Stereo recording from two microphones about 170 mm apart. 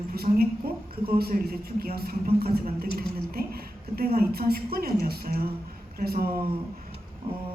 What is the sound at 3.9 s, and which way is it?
A woman's voice, 60° right (ahead or behind).